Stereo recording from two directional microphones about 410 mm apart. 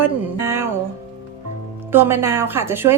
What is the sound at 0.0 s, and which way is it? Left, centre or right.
Speech, centre.